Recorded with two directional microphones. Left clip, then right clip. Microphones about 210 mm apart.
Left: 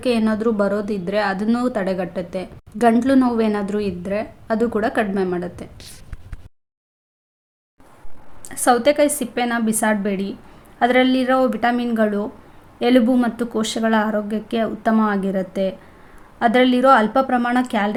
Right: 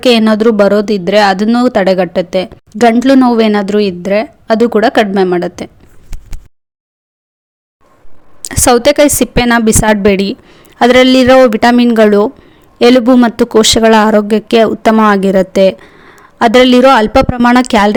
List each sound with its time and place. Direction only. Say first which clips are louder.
0.0 s speech: right 12 dB; 40° right (ahead or behind)
8.4 s speech: right 9 dB; 45° right (ahead or behind)